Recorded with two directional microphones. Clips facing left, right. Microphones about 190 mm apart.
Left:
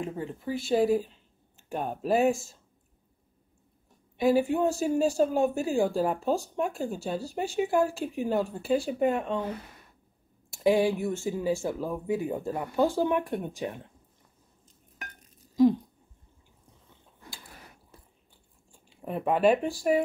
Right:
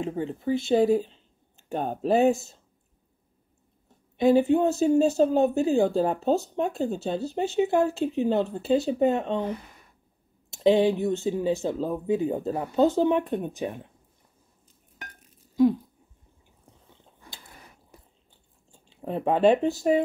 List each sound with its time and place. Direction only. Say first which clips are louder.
0.0 s speech: right 5 dB; 25° right (ahead or behind)
4.2 s speech: right 4 dB; 25° right (ahead or behind)
18.7 s speech: right 3 dB; 25° right (ahead or behind)